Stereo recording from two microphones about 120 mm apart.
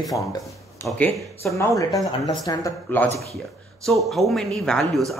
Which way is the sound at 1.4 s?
25° left (ahead or behind).